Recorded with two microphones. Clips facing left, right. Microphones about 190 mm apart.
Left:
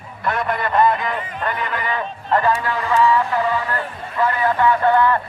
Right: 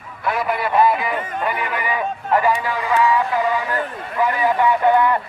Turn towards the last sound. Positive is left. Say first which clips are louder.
# even
turn(degrees=-15)  # may be behind; listen again after turning